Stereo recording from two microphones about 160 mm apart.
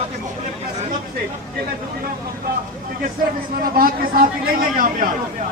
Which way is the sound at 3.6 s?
65° right (ahead or behind).